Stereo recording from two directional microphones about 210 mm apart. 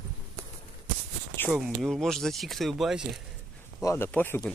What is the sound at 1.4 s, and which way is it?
Speech, centre (ahead or behind).